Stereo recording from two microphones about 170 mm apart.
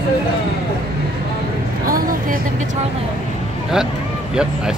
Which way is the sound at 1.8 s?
55° right (ahead or behind).